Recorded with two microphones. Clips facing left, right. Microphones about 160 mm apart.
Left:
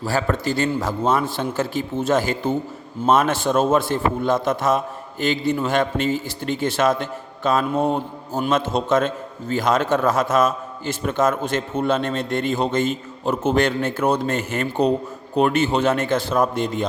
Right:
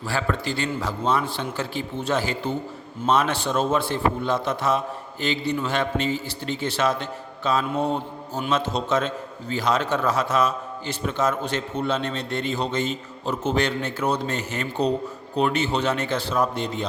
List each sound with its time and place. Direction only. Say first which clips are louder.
0.0 s a man's voice: left 4 dB; 40° left (ahead or behind)